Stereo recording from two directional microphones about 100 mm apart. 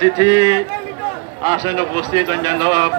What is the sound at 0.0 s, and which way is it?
A man's voice, 35° right (ahead or behind).